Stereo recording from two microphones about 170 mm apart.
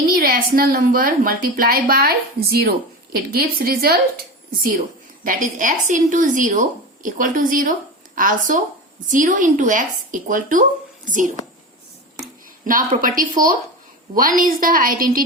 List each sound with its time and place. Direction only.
0.2 s a woman's voice: 60° right (ahead or behind)
5.2 s speech: 50° right (ahead or behind)
12.7 s a woman's voice: 50° right (ahead or behind)